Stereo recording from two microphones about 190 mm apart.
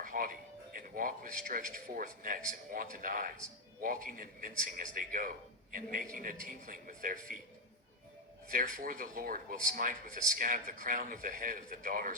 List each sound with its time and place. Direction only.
0.0 s music: 45° right (ahead or behind)
0.8 s a man's voice: 45° right (ahead or behind)
8.4 s a man's voice: 50° right (ahead or behind)